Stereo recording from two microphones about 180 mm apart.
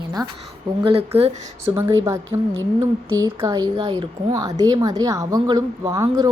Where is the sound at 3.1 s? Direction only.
20° right (ahead or behind).